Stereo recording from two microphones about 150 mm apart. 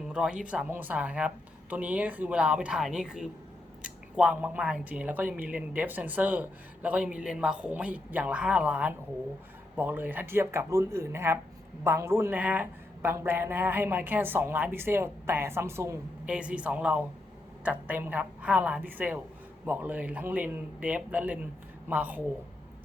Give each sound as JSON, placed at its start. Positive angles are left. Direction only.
{"t": 0.1, "sound": "speech", "side_deg": -5}
{"t": 16.2, "sound": "speech", "side_deg": -5}